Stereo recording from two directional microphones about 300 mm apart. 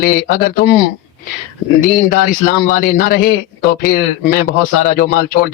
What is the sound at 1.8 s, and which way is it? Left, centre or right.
A man's voice, left.